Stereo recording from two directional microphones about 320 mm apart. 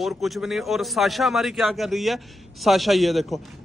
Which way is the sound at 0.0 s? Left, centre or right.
Centre.